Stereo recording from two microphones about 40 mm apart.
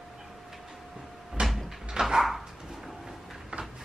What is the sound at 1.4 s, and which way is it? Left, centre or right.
Cupboard open or close, right.